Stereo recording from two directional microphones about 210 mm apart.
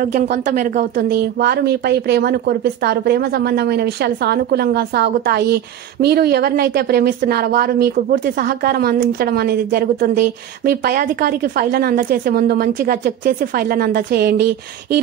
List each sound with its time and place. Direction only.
0.0 s speech: 45° right (ahead or behind)